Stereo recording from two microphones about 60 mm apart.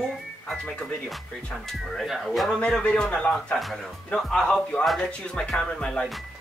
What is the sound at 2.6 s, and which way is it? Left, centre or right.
Speech, centre.